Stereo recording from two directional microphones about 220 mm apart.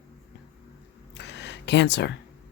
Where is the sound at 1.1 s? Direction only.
50° left (ahead or behind).